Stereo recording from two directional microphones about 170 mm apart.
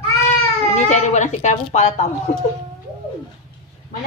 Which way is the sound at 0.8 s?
45° left (ahead or behind).